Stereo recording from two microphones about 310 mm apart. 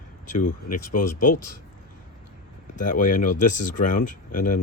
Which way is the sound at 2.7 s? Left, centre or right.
Left.